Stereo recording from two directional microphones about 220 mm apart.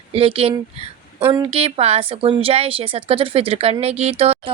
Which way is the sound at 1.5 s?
25° right (ahead or behind).